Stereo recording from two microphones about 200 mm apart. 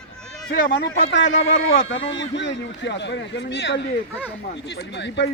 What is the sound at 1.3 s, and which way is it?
Speech, 70° left (ahead or behind).